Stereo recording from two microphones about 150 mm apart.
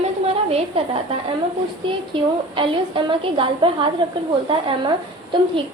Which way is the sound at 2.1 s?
35° right (ahead or behind).